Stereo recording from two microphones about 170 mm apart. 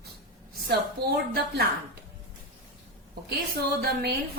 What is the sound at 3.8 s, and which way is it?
Speech, 65° right (ahead or behind).